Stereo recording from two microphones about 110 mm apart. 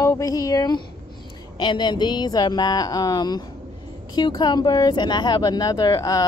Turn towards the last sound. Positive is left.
turn(degrees=35)  # may be behind; listen again after turning